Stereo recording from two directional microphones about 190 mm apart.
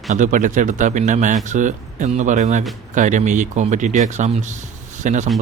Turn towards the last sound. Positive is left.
turn(degrees=-40)  # may be behind; listen again after turning